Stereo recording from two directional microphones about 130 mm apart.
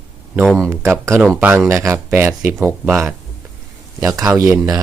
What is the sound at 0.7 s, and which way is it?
Speech, 20° right (ahead or behind).